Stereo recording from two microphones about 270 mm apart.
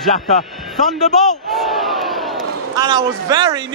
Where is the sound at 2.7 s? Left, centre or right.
Centre.